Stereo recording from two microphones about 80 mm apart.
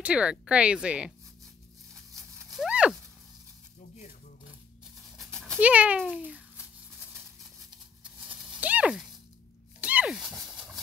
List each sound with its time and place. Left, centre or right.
0.0 s speech: centre
2.4 s horse: centre
5.1 s dog: centre
5.6 s speech: centre
8.5 s a sound: centre
10.4 s horse: centre